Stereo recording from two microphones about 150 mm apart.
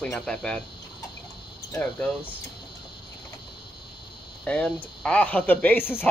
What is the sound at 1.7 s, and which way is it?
Speech, 10° left (ahead or behind).